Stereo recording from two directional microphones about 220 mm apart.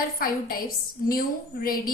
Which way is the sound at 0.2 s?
40° left (ahead or behind).